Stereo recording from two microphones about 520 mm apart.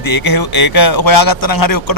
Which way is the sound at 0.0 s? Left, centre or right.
Left.